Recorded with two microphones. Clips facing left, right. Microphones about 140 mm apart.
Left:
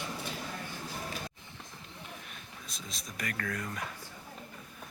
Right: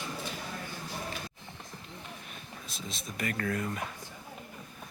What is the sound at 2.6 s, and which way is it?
Speech, centre (ahead or behind).